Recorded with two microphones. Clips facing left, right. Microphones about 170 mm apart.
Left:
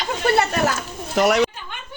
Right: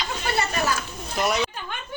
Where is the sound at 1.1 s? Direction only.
80° left.